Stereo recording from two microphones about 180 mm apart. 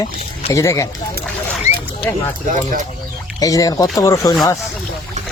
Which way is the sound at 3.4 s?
20° left (ahead or behind).